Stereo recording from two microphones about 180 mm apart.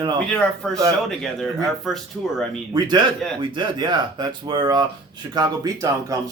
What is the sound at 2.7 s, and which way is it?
A man's voice, 25° right (ahead or behind).